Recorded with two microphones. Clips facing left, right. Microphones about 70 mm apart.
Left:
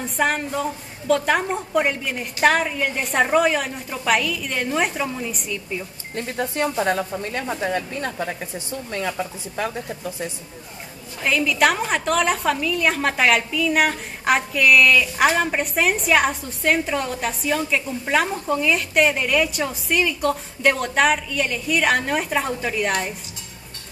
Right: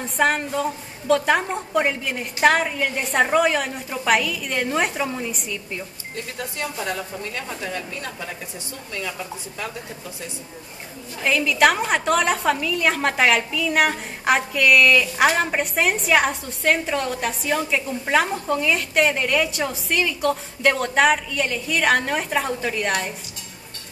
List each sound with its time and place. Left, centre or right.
0.0 s a woman's voice: centre
6.1 s a woman's voice: left
11.2 s a woman's voice: centre